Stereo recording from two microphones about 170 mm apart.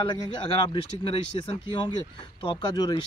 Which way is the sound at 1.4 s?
30° left (ahead or behind).